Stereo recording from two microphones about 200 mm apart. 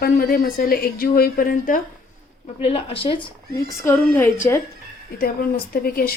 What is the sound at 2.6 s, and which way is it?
Speech, 30° left (ahead or behind).